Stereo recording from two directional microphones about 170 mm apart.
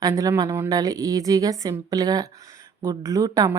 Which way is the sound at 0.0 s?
20° right (ahead or behind).